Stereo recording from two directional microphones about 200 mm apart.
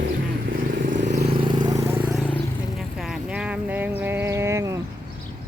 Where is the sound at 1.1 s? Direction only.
30° right (ahead or behind).